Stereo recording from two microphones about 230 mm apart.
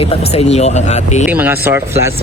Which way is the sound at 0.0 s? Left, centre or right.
Left.